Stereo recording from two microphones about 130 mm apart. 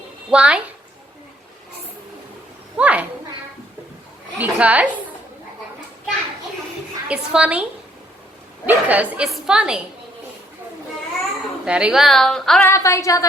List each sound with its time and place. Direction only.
0.3 s a woman's voice: 10° right (ahead or behind)
2.7 s a woman's voice: 10° right (ahead or behind)
4.4 s a woman's voice: 10° right (ahead or behind)
7.1 s a woman's voice: 10° right (ahead or behind)
11.6 s a woman's voice: 10° right (ahead or behind)
12.6 s a woman's voice: 20° left (ahead or behind)